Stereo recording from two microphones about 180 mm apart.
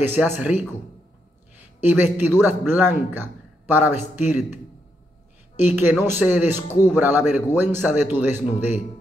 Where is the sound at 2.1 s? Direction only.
10° right (ahead or behind).